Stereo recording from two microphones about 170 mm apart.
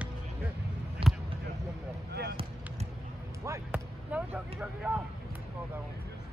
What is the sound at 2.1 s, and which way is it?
Basketball bounce, 70° right (ahead or behind).